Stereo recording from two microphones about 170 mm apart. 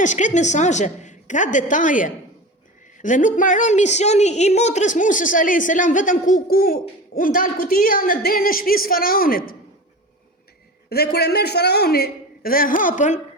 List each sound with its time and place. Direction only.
0.0 s a woman's voice: 45° left (ahead or behind)
10.8 s a man's voice: 70° left (ahead or behind); by 13.1 s 50° left (ahead or behind)